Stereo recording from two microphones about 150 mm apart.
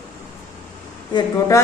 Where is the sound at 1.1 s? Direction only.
25° left (ahead or behind).